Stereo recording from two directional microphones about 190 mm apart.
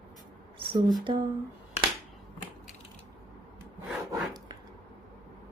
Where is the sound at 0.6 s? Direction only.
25° right (ahead or behind).